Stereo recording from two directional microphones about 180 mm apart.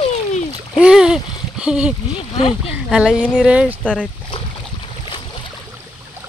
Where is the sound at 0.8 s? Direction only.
5° right (ahead or behind).